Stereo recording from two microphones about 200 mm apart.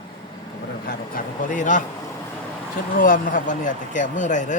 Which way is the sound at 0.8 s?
45° left (ahead or behind).